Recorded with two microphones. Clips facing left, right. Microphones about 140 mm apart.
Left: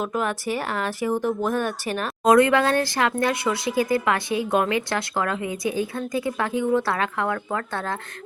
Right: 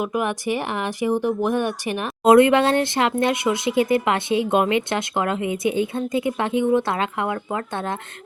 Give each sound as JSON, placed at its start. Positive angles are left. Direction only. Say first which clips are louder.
{"t": 0.0, "sound": "a woman's voice", "louder": "right 2 dB", "side_deg": -15}